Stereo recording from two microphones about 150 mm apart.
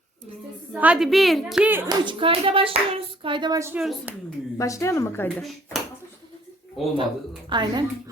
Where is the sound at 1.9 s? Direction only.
30° right (ahead or behind).